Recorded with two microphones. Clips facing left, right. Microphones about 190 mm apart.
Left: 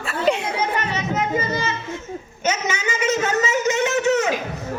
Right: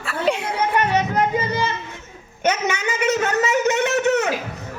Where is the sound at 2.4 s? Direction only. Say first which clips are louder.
Right 2 dB; 60° right (ahead or behind).